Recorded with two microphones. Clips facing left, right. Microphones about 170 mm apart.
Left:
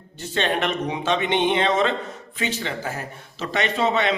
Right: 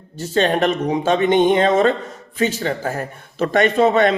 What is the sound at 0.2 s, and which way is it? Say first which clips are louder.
Speech: right 6 dB; 40° right (ahead or behind).